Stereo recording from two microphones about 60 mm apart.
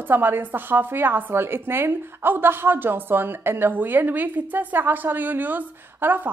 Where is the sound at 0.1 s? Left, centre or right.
Right.